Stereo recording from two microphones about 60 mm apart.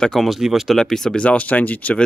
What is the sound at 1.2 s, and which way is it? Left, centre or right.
Speech, left.